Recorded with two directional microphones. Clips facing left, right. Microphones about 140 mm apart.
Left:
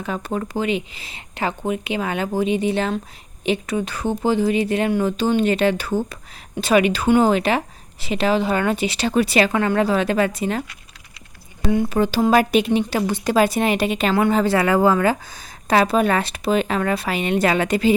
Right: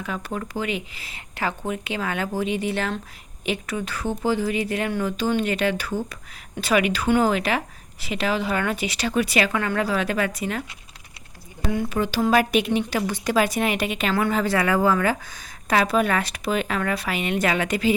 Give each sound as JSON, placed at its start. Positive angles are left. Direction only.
{"t": 0.0, "sound": "a woman's voice", "side_deg": 30}
{"t": 11.7, "sound": "a woman's voice", "side_deg": 20}
{"t": 11.9, "sound": "a woman's voice", "side_deg": 30}